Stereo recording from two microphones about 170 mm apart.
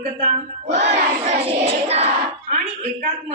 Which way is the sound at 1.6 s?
35° right (ahead or behind).